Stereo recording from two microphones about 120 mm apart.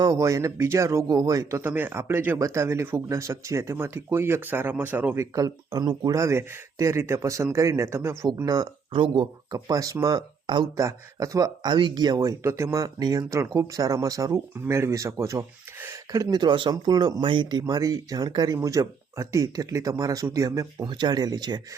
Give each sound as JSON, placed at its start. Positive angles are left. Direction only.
{"t": 0.0, "sound": "speech", "side_deg": -25}
{"t": 10.8, "sound": "speech", "side_deg": -25}
{"t": 16.1, "sound": "speech", "side_deg": -35}